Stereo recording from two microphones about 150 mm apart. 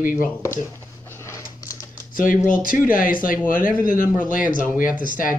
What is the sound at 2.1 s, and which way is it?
Speech, 65° left (ahead or behind).